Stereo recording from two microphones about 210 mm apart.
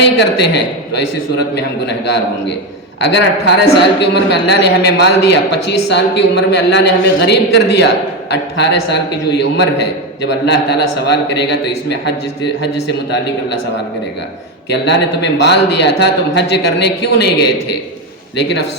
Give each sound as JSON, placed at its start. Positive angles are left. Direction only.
{"t": 0.2, "sound": "a woman's voice", "side_deg": 55}
{"t": 3.0, "sound": "a woman's voice", "side_deg": 55}
{"t": 14.7, "sound": "a woman's voice", "side_deg": 55}
{"t": 18.3, "sound": "a man's voice", "side_deg": 55}